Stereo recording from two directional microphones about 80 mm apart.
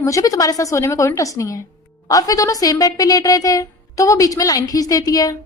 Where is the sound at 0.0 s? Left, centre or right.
Left.